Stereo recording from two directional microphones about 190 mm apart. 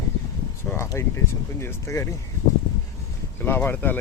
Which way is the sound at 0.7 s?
15° left (ahead or behind).